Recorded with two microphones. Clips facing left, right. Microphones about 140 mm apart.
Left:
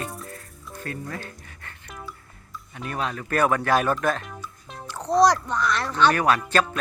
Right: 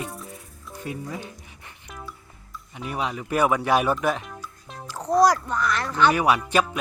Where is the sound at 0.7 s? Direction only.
15° right (ahead or behind).